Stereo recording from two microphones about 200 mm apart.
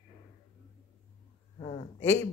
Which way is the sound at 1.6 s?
35° left (ahead or behind).